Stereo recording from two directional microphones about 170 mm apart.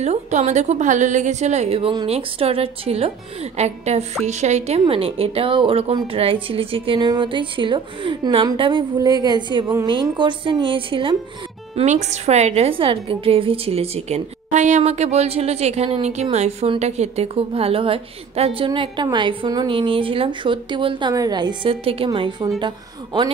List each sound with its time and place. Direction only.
0.0 s a woman's voice: 40° right (ahead or behind)
11.7 s a woman's voice: 45° right (ahead or behind)